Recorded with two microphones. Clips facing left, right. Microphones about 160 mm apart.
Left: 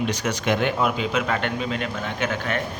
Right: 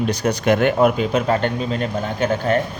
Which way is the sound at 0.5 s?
50° right (ahead or behind).